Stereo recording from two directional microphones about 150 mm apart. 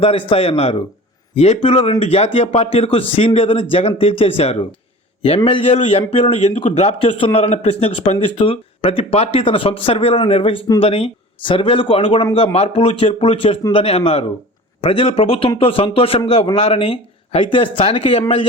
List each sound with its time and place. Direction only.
0.0 s a man's voice: 40° left (ahead or behind)